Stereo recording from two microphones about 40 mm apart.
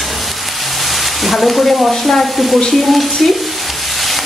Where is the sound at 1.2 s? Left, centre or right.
Centre.